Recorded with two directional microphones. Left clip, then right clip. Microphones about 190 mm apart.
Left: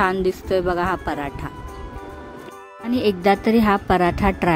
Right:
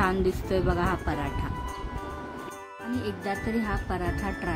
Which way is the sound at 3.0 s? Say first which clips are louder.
Left 15 dB; 50° left (ahead or behind).